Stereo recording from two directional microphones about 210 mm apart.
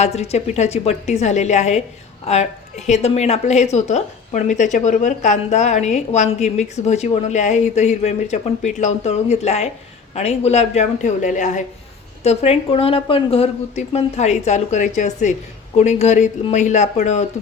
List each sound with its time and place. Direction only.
0.0 s a woman's voice: 30° left (ahead or behind)